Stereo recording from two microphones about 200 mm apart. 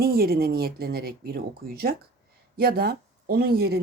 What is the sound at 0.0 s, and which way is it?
Speech, 50° right (ahead or behind).